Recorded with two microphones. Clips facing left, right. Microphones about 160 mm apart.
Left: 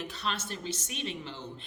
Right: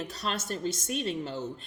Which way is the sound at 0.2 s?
40° right (ahead or behind).